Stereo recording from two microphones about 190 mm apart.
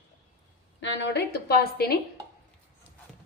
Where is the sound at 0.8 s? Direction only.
65° left (ahead or behind).